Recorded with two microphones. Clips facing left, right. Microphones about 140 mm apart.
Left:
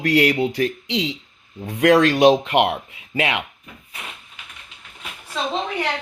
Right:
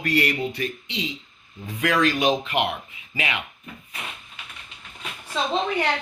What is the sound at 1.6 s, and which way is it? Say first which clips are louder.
Speech: left 7 dB; 70° left (ahead or behind).